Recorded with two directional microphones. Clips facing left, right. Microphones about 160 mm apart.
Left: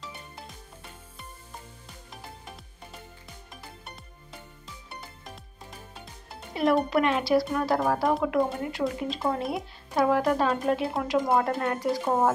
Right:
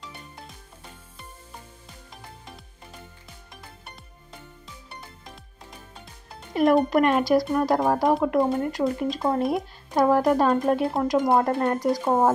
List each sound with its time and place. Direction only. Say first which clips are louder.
6.5 s speech: right 4 dB; 45° right (ahead or behind)